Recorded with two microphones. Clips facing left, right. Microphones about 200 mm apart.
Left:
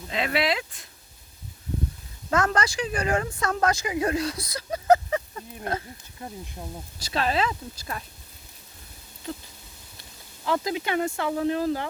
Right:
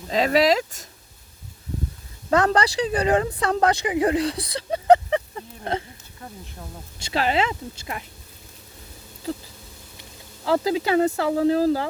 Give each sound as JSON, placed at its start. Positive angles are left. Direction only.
{"t": 0.1, "sound": "speech", "side_deg": -35}
{"t": 2.3, "sound": "speech", "side_deg": -35}
{"t": 6.1, "sound": "speech", "side_deg": 20}
{"t": 7.1, "sound": "speech", "side_deg": -25}
{"t": 10.4, "sound": "speech", "side_deg": -35}